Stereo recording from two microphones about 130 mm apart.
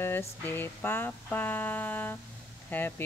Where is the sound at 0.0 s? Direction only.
15° left (ahead or behind).